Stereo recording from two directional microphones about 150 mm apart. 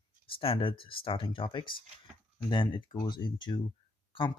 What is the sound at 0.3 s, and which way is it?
Speech, 40° left (ahead or behind).